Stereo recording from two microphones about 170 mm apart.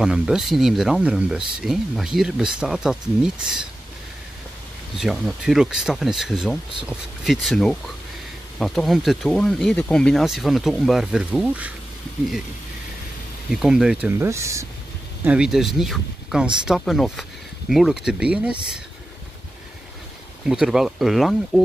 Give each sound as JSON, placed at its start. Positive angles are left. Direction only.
{"t": 0.0, "sound": "speech", "side_deg": -5}
{"t": 4.9, "sound": "speech", "side_deg": 0}
{"t": 13.5, "sound": "speech", "side_deg": 0}
{"t": 14.2, "sound": "speech", "side_deg": -15}
{"t": 15.2, "sound": "speech", "side_deg": -5}
{"t": 20.4, "sound": "speech", "side_deg": -5}